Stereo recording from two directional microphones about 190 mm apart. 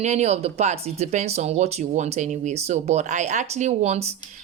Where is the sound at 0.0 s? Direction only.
35° right (ahead or behind).